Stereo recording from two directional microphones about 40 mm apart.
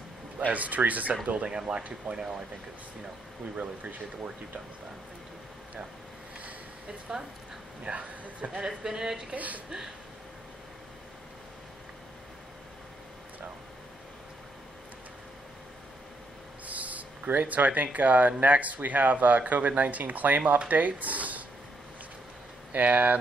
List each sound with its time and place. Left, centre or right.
0.5 s speech: right
2.1 s speech: centre
7.1 s speech: centre
7.8 s speech: right
8.6 s speech: centre
9.3 s speech: right
16.6 s a sound: right
17.3 s speech: right
22.7 s speech: right